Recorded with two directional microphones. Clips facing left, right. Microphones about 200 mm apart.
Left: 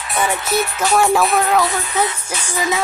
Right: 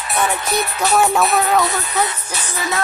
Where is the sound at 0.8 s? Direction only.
Centre (ahead or behind).